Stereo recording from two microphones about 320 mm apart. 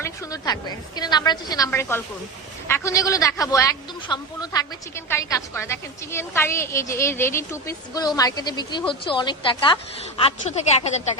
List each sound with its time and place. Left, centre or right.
0.0 s a man's voice: centre